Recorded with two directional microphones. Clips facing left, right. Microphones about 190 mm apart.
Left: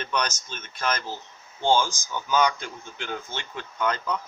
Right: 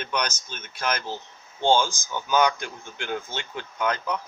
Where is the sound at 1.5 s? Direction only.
20° right (ahead or behind).